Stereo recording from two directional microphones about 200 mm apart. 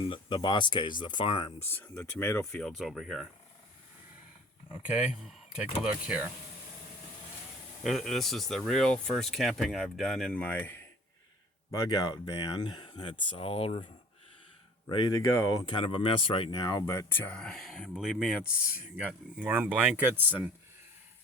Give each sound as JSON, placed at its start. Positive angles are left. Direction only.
{"t": 0.1, "sound": "speech", "side_deg": 25}
{"t": 1.7, "sound": "speech", "side_deg": 10}
{"t": 4.7, "sound": "speech", "side_deg": -10}
{"t": 7.9, "sound": "speech", "side_deg": 0}